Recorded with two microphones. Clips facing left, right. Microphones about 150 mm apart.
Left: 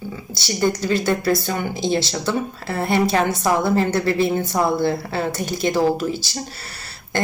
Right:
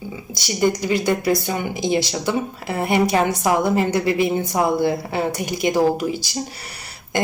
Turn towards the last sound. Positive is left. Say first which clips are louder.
# right 1 dB
turn(degrees=-15)  # may be behind; listen again after turning